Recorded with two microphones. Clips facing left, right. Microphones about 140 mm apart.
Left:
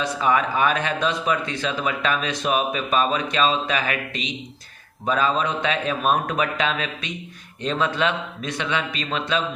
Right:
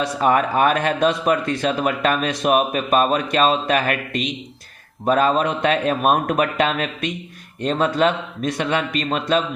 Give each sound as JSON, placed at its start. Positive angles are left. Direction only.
{"t": 0.2, "sound": "speech", "side_deg": -50}